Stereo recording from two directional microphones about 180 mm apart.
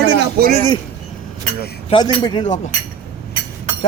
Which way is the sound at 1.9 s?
25° left (ahead or behind).